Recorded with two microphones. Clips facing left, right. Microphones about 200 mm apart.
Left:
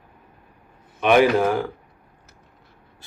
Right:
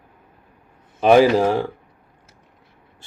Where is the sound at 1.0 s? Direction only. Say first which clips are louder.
Right 3 dB; 30° right (ahead or behind).